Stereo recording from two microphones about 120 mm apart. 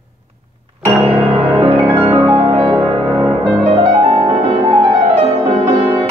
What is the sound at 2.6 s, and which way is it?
Music, 45° right (ahead or behind).